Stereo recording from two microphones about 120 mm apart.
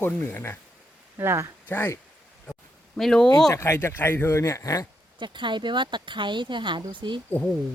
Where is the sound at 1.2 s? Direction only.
20° right (ahead or behind).